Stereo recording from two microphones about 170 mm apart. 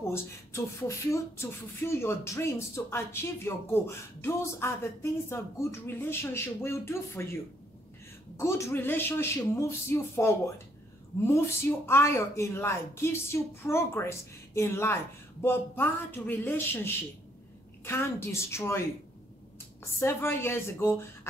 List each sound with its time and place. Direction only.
0.0 s beatboxing: 15° left (ahead or behind)
8.4 s beatboxing: 15° left (ahead or behind)
19.8 s beatboxing: 15° left (ahead or behind)